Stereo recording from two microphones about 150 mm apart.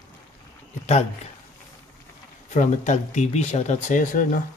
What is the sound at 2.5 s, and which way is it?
Speech, 50° left (ahead or behind).